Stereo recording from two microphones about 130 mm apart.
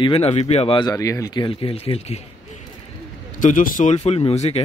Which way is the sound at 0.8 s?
30° left (ahead or behind).